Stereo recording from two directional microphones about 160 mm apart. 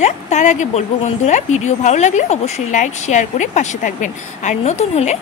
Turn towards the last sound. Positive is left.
turn(degrees=45)  # may be behind; listen again after turning